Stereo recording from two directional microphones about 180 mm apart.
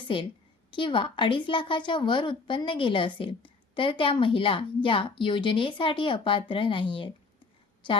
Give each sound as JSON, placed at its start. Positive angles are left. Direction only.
{"t": 0.0, "sound": "a woman's voice", "side_deg": 30}